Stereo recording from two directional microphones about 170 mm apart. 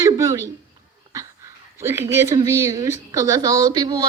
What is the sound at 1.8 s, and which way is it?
A woman's voice, 15° right (ahead or behind).